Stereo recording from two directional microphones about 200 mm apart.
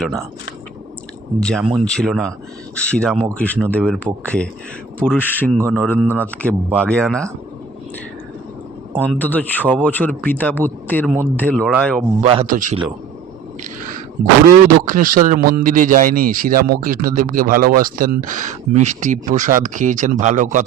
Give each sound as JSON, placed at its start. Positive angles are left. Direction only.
{"t": 1.4, "sound": "speech", "side_deg": 5}
{"t": 8.9, "sound": "speech", "side_deg": -10}
{"t": 9.1, "sound": "speech", "side_deg": 10}
{"t": 12.2, "sound": "speech", "side_deg": -30}
{"t": 12.5, "sound": "speech", "side_deg": -40}
{"t": 14.4, "sound": "speech", "side_deg": -40}